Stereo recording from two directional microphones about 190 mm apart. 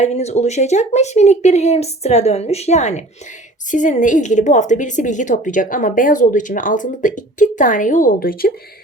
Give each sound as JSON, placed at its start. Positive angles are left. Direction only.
{"t": 0.0, "sound": "a woman's voice", "side_deg": 35}